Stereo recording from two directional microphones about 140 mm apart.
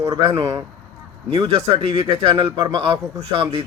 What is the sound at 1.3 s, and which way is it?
A man's voice, 45° right (ahead or behind).